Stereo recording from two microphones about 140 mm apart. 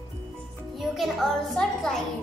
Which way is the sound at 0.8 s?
Centre (ahead or behind).